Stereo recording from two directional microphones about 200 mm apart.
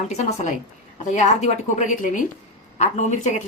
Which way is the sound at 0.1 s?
35° left (ahead or behind).